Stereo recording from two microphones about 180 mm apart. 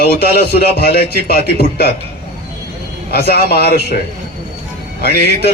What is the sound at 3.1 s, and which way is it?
Speech, 60° left (ahead or behind).